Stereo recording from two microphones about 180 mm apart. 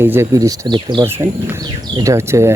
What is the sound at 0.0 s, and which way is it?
Speech, 15° right (ahead or behind).